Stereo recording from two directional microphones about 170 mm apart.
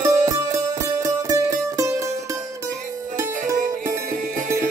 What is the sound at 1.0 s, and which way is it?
Music, 20° right (ahead or behind).